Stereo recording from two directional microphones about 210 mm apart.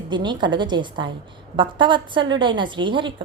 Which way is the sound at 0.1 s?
20° right (ahead or behind).